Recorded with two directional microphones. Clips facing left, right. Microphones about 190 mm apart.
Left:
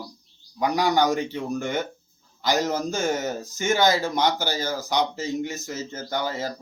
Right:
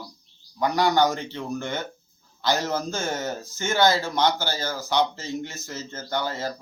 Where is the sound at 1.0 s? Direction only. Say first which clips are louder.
Left 1 dB; 15° left (ahead or behind).